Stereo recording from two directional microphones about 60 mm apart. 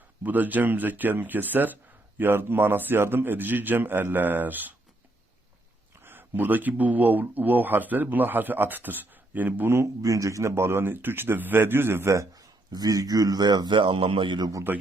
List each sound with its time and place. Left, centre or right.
0.2 s speech: right
6.0 s speech: right
9.8 s speech: right
12.1 s speech: right
14.7 s speech: right